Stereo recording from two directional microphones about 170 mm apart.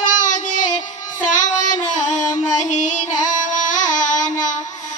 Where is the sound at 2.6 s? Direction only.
45° left (ahead or behind).